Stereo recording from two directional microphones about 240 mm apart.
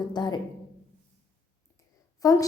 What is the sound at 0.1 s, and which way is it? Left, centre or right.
Speech, centre.